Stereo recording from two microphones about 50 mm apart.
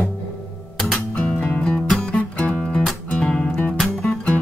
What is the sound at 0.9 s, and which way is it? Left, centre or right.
Music, left.